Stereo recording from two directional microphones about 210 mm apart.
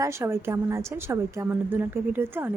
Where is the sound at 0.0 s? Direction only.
15° right (ahead or behind).